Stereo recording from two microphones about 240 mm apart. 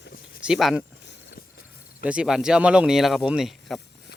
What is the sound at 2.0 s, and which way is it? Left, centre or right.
Speech, centre.